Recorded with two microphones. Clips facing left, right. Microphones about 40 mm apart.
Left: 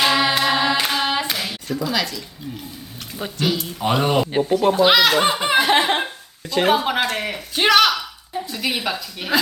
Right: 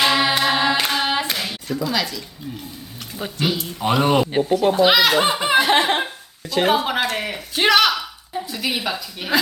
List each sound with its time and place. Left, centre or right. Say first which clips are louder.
0.0 s hands: even; centre
3.3 s a man's voice: left 1 dB; centre
6.5 s a sound: left 1 dB; centre